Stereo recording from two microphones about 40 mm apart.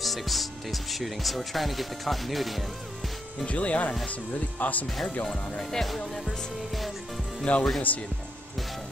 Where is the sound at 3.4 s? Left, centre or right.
Left.